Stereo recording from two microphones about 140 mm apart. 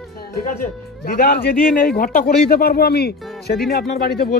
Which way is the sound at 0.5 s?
90° left.